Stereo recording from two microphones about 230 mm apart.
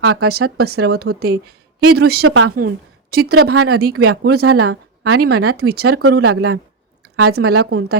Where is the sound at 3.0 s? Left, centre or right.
Right.